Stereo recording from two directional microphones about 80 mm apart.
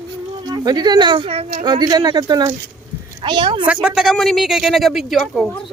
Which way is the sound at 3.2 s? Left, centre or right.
Right.